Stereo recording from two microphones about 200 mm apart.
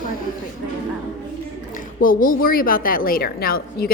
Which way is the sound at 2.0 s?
45° left (ahead or behind).